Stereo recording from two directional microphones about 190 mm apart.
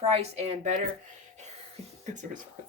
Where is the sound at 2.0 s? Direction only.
40° right (ahead or behind).